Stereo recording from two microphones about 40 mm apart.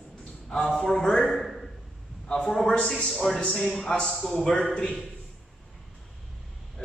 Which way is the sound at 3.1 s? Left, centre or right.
Centre.